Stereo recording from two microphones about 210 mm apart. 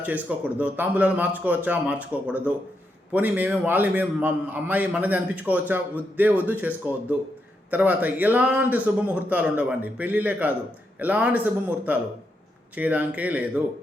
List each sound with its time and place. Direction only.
0.0 s a man's voice: 5° right (ahead or behind)